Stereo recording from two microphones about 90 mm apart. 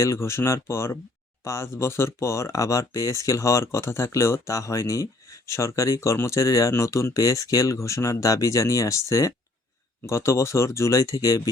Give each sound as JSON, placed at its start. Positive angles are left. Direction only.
{"t": 0.0, "sound": "speech", "side_deg": 30}